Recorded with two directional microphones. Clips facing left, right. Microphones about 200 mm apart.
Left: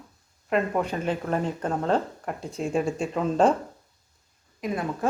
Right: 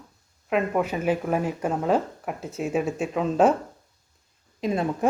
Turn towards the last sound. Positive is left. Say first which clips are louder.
# right 4 dB
turn(degrees=-25)  # may be behind; listen again after turning